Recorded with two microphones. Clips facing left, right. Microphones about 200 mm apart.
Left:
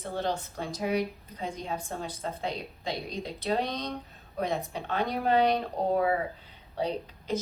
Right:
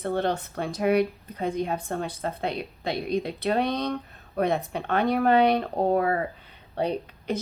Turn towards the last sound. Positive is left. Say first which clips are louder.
# right 4 dB
turn(degrees=-60)  # may be behind; listen again after turning